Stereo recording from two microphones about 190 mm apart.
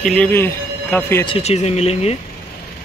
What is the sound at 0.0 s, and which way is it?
Speech, 5° left (ahead or behind).